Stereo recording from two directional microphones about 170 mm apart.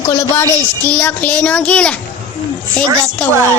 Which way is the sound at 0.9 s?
10° left (ahead or behind).